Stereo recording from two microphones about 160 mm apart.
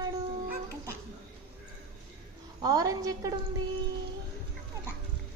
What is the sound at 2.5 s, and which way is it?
Speech, 25° right (ahead or behind).